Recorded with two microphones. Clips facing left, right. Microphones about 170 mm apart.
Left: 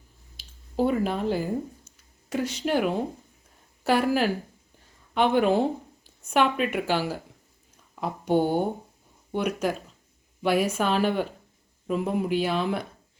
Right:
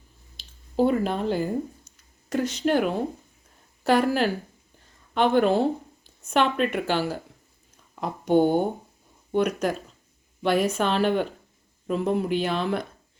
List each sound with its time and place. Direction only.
0.3 s squish: 5° left (ahead or behind)
2.3 s speech: 10° left (ahead or behind)